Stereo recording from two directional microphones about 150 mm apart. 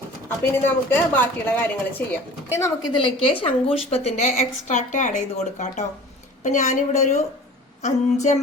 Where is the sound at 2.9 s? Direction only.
35° left (ahead or behind).